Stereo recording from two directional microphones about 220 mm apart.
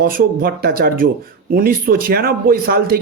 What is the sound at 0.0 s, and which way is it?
A man's voice, 45° right (ahead or behind).